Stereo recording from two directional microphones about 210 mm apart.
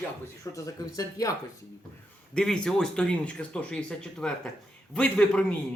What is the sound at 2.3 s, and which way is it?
A man's voice, 5° left (ahead or behind).